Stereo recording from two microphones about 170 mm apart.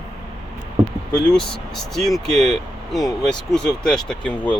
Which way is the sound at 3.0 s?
25° left (ahead or behind).